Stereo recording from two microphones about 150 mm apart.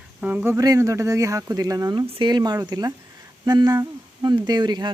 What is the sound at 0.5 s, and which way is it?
Speech, 25° right (ahead or behind).